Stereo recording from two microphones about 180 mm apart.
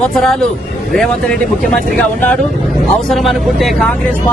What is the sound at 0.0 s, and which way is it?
Speech, centre (ahead or behind).